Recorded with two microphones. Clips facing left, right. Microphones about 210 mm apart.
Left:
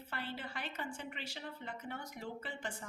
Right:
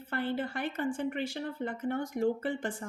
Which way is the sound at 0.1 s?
55° right (ahead or behind).